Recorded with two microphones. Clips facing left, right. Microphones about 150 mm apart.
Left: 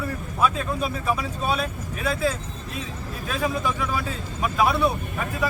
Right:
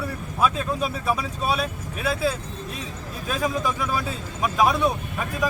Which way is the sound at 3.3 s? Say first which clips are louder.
Even; 15° right (ahead or behind).